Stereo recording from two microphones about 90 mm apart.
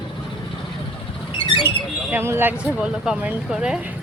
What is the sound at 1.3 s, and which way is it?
Bird, 70° left (ahead or behind).